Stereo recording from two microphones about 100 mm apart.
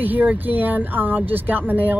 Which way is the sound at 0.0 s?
15° right (ahead or behind).